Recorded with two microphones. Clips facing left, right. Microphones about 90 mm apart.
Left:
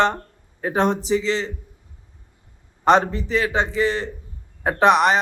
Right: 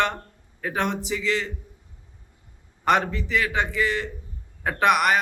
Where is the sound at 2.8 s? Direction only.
30° left (ahead or behind).